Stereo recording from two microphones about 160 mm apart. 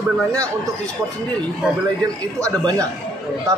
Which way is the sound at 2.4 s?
20° right (ahead or behind).